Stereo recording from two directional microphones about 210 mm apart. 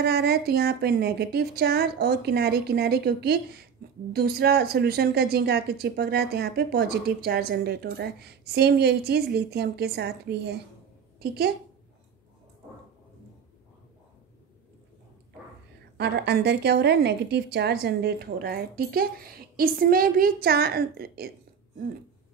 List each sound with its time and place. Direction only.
0.0 s a woman's voice: 50° right (ahead or behind)
16.0 s a woman's voice: 55° right (ahead or behind)